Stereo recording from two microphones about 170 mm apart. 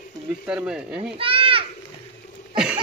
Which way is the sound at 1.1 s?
30° right (ahead or behind).